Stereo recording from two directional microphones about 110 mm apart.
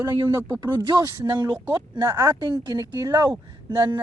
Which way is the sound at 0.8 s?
35° right (ahead or behind).